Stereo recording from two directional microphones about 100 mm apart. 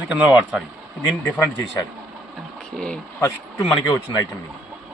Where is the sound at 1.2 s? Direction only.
15° left (ahead or behind).